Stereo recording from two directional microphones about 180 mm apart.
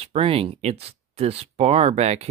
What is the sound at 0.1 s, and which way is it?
Speech, 35° right (ahead or behind).